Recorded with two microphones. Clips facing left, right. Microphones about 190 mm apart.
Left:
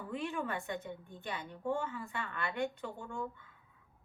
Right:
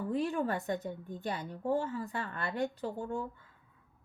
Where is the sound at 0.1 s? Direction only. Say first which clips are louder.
Right 5 dB; 35° right (ahead or behind).